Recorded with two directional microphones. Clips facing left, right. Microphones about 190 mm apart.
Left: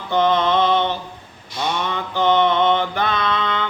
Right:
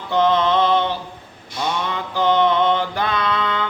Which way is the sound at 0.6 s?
5° right (ahead or behind).